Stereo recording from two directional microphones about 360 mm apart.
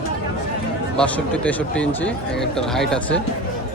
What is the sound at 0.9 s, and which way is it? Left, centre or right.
Speech, centre.